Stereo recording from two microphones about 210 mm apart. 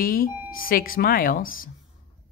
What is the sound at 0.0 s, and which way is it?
Speech, 45° left (ahead or behind).